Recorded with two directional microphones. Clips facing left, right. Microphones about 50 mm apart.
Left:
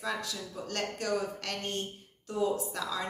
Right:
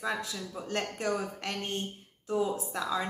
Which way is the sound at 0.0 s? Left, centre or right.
Centre.